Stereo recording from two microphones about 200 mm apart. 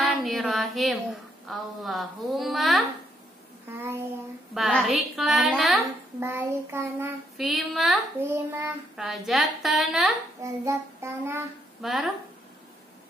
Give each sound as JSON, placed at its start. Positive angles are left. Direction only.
{"t": 0.0, "sound": "a sound", "side_deg": 0}
{"t": 1.5, "sound": "speech", "side_deg": 0}
{"t": 3.6, "sound": "child singing", "side_deg": -10}
{"t": 4.6, "sound": "speech", "side_deg": 0}
{"t": 6.1, "sound": "child singing", "side_deg": -10}
{"t": 7.3, "sound": "speech", "side_deg": 0}
{"t": 10.4, "sound": "child singing", "side_deg": -15}
{"t": 11.8, "sound": "speech", "side_deg": 0}